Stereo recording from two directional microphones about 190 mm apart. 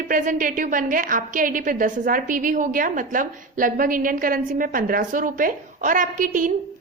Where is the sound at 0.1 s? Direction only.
45° right (ahead or behind).